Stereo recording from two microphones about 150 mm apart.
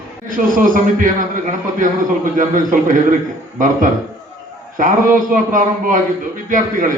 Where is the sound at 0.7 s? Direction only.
60° right (ahead or behind).